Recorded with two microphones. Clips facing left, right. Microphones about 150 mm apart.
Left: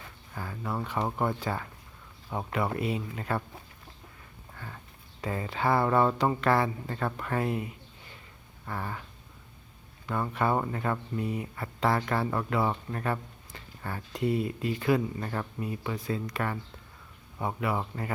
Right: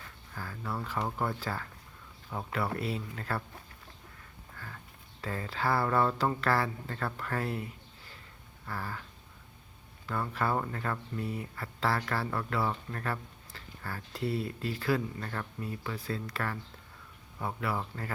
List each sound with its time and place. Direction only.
0.3 s speech: 15° left (ahead or behind)
4.5 s a sound: 15° left (ahead or behind)
5.2 s speech: 15° left (ahead or behind)
10.1 s speech: 15° left (ahead or behind)